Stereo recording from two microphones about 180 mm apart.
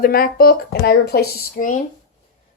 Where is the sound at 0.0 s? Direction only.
55° left (ahead or behind).